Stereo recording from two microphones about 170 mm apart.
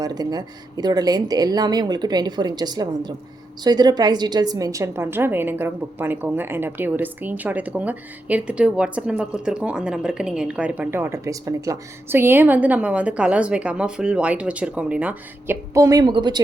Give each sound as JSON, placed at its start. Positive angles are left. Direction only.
{"t": 0.0, "sound": "a woman's voice", "side_deg": -20}